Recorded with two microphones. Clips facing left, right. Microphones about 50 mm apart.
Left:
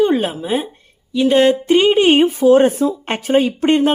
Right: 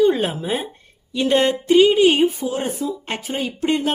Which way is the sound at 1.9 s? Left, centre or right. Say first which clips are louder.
Left 3 dB; left.